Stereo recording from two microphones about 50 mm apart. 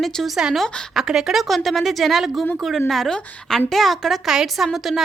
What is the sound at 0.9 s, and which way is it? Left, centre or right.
Speech, centre.